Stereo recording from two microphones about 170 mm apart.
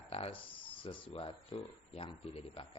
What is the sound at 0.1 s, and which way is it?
Music, 35° left (ahead or behind).